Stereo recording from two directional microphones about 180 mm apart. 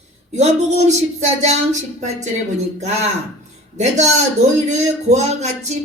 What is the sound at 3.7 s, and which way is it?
Speech, 40° right (ahead or behind).